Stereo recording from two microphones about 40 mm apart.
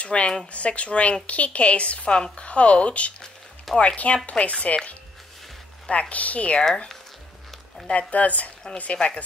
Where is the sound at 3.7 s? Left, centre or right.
Centre.